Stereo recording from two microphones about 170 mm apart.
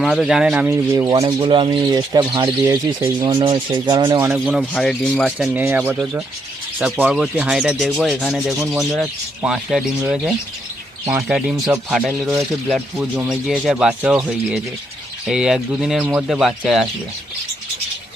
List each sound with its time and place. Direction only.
0.0 s speech: centre (ahead or behind); by 3.2 s 15° right (ahead or behind)
3.2 s speech: 30° right (ahead or behind)
4.3 s speech: centre (ahead or behind)
5.2 s speech: 5° right (ahead or behind)
15.3 s speech: 5° right (ahead or behind)